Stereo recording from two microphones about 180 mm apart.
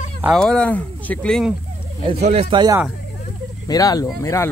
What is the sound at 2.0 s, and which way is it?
Speech, 30° right (ahead or behind).